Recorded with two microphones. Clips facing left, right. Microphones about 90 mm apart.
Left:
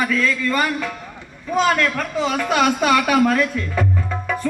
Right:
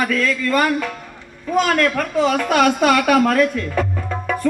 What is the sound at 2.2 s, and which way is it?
A woman's voice, 50° right (ahead or behind).